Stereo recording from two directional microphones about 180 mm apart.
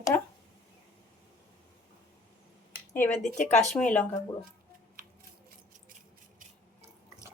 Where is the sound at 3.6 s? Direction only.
5° left (ahead or behind).